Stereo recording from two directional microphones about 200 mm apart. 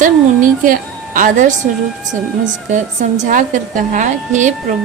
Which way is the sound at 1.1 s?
40° right (ahead or behind).